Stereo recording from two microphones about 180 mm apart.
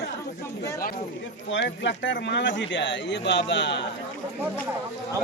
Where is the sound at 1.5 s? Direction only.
85° left.